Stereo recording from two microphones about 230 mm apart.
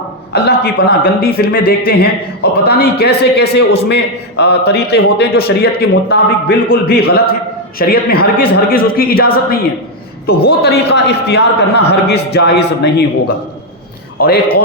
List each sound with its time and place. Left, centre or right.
0.4 s a man's voice: left